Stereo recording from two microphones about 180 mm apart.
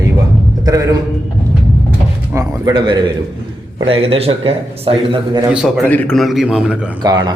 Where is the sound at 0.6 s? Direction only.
20° right (ahead or behind).